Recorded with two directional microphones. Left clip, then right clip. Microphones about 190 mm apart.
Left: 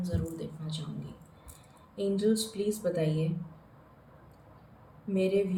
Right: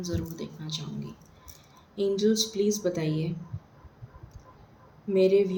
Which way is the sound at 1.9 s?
40° right (ahead or behind).